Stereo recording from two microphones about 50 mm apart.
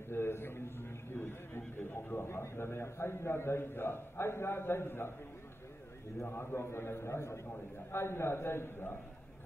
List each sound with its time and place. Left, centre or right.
0.1 s a sound: left
1.8 s neigh: left
2.2 s a man's voice: left
6.2 s a man's voice: left